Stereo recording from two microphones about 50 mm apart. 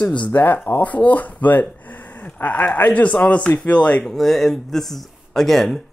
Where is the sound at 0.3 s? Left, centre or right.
Left.